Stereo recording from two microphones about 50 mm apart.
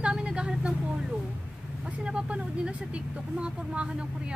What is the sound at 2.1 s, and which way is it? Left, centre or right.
Speech, right.